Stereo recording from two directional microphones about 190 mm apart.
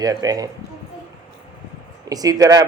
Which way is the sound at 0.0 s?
20° right (ahead or behind).